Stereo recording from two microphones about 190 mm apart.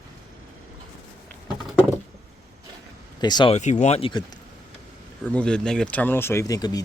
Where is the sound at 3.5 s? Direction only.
40° left (ahead or behind).